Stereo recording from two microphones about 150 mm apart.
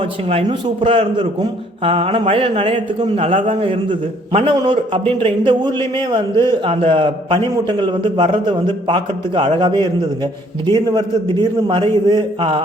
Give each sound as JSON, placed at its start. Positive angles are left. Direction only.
{"t": 0.3, "sound": "a man's voice", "side_deg": -40}
{"t": 4.5, "sound": "a man's voice", "side_deg": -30}
{"t": 10.9, "sound": "a man's voice", "side_deg": -30}